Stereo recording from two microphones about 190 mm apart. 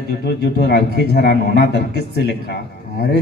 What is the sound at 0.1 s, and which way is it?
A man's voice, 55° left (ahead or behind).